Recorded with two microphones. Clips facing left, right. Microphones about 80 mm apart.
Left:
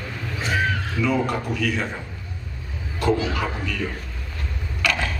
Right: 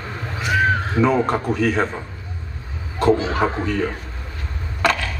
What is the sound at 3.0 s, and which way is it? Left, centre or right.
Speech, right.